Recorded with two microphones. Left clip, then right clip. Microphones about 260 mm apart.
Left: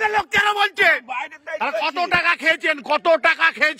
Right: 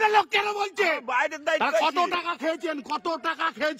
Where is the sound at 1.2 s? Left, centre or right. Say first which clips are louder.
Right 4 dB; right.